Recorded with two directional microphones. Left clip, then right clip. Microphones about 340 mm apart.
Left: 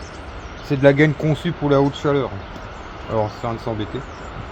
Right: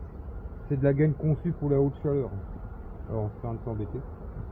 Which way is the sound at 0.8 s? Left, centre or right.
Left.